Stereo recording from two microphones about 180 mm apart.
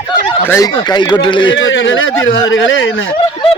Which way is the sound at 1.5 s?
90° left.